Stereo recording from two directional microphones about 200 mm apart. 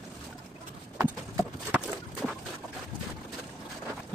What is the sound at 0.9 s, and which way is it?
Clip-clop, 15° right (ahead or behind).